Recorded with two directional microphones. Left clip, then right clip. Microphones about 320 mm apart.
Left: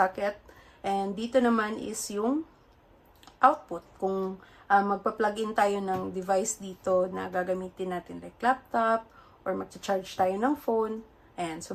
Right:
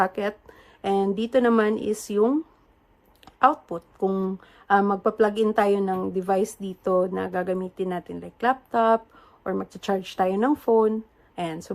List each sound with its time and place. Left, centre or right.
0.0 s a woman's voice: right